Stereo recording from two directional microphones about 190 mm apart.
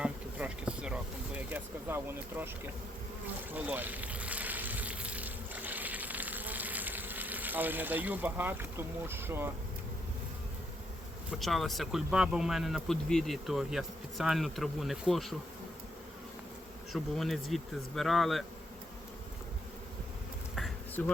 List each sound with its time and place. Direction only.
0.0 s a sound: 5° right (ahead or behind)
3.5 s a sound: 10° right (ahead or behind)
9.0 s speech: 10° right (ahead or behind)
11.3 s speech: centre (ahead or behind)
16.9 s speech: centre (ahead or behind)
20.6 s bee: centre (ahead or behind)